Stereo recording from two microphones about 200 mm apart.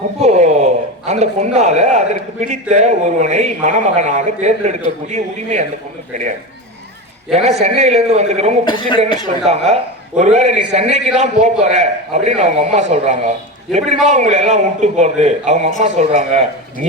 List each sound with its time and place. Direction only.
0.2 s a man's voice: 35° right (ahead or behind)
7.3 s a man's voice: 35° right (ahead or behind)
8.6 s speech: 25° left (ahead or behind)
9.5 s a man's voice: 30° right (ahead or behind)